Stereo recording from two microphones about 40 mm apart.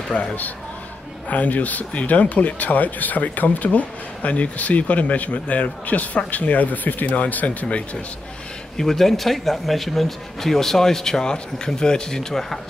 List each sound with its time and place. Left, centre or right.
0.1 s speech: left
8.7 s speech: centre